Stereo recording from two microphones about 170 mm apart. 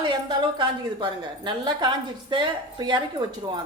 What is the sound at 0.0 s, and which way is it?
A woman's voice, 25° right (ahead or behind).